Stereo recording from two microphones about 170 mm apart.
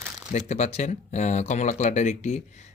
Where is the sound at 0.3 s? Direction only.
45° left (ahead or behind).